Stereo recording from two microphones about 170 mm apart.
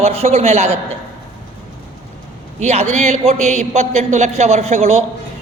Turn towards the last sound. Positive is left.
turn(degrees=-40)  # may be behind; listen again after turning